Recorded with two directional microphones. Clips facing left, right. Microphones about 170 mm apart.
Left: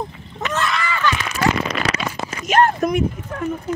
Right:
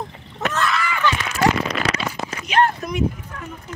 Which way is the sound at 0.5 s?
Centre (ahead or behind).